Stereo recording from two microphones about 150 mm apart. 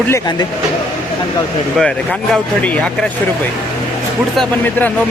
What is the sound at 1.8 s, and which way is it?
Speech, 5° left (ahead or behind).